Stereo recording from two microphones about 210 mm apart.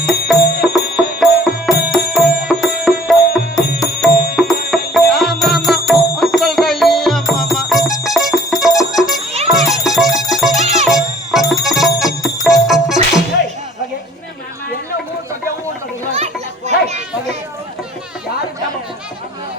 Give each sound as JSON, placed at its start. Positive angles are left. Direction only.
{"t": 0.0, "sound": "music", "side_deg": 0}
{"t": 0.4, "sound": "music", "side_deg": 50}
{"t": 0.7, "sound": "music", "side_deg": 0}
{"t": 8.8, "sound": "jingle bell", "side_deg": 0}
{"t": 9.5, "sound": "music", "side_deg": 0}
{"t": 10.6, "sound": "music", "side_deg": -35}
{"t": 10.8, "sound": "music", "side_deg": 0}
{"t": 16.1, "sound": "children playing", "side_deg": -30}